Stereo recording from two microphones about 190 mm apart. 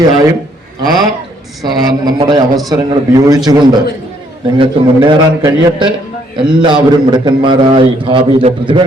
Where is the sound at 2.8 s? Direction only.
20° right (ahead or behind).